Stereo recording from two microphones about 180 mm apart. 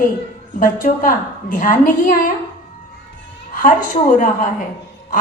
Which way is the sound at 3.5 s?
45° left (ahead or behind).